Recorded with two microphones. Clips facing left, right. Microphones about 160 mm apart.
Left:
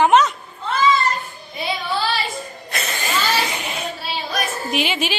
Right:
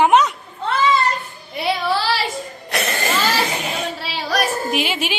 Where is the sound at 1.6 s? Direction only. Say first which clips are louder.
Right 3 dB; 75° right (ahead or behind).